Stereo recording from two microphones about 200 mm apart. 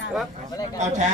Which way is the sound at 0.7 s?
35° right (ahead or behind).